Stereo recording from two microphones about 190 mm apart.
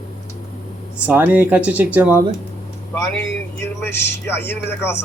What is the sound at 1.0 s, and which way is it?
Speech, 10° right (ahead or behind).